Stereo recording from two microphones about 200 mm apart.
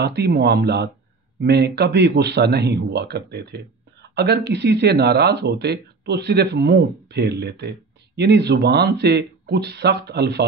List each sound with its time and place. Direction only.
0.0 s speech: 55° right (ahead or behind)